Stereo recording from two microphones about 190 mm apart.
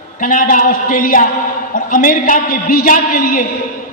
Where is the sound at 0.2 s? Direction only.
45° left (ahead or behind).